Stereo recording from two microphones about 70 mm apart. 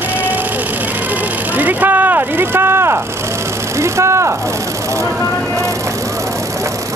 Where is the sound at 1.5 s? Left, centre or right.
Right.